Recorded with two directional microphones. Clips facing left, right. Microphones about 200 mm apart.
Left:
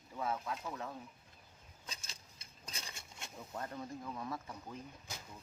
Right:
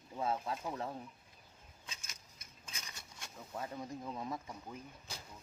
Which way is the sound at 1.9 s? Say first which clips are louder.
Left 3 dB; 30° left (ahead or behind).